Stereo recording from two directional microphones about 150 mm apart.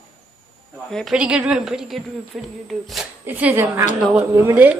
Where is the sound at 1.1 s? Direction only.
5° right (ahead or behind).